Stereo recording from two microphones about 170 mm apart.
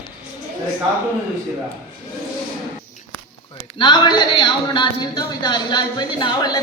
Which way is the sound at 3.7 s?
25° left (ahead or behind).